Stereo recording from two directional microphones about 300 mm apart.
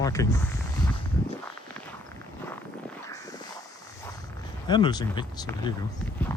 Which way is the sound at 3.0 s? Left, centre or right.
Centre.